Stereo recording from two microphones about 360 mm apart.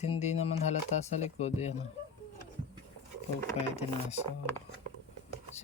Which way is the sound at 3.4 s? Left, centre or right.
Centre.